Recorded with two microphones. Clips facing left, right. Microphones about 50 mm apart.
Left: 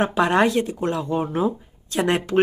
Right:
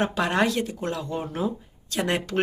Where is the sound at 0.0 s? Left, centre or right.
Centre.